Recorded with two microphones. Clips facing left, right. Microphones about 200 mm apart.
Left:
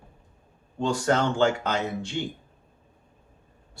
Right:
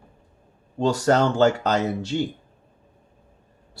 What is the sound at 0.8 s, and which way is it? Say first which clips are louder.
Speech: right 4 dB; 40° right (ahead or behind).